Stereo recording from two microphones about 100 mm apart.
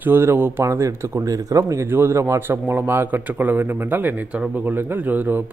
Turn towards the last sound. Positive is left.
turn(degrees=-20)  # may be behind; listen again after turning